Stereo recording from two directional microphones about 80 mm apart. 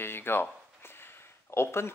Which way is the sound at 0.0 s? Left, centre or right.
Left.